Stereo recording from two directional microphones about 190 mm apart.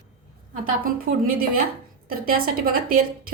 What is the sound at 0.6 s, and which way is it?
A woman's voice, 50° right (ahead or behind).